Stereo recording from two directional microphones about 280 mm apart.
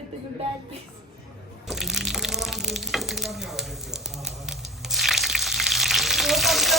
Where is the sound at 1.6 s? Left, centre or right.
Centre.